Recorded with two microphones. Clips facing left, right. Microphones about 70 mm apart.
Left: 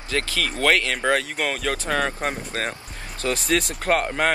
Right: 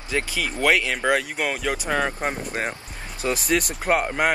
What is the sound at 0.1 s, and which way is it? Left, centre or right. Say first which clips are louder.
Speech: even; centre.